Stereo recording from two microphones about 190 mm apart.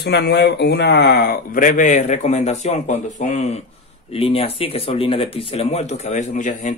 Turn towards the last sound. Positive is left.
turn(degrees=40)  # may be behind; listen again after turning